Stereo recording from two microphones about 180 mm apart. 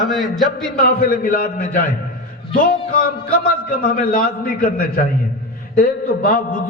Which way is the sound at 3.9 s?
50° left (ahead or behind).